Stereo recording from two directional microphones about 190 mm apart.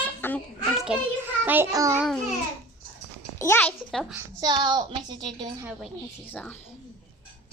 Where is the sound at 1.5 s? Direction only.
15° right (ahead or behind).